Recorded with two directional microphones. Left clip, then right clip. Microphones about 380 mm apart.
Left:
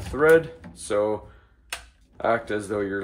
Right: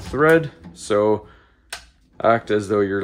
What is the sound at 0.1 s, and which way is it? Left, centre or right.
Speech, right.